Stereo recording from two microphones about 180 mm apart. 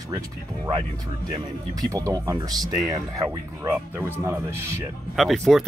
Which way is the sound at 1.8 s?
20° right (ahead or behind).